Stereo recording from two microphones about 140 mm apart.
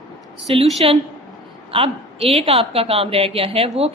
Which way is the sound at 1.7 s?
40° right (ahead or behind).